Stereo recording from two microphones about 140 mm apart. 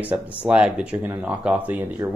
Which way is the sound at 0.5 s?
10° right (ahead or behind).